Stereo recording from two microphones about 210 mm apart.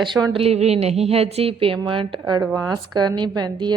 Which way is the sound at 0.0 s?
20° right (ahead or behind).